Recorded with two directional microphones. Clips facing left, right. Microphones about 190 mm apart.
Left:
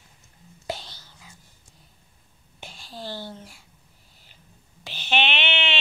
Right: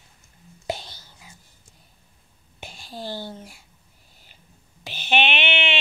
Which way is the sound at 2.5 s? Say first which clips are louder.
Right 3 dB; 15° right (ahead or behind).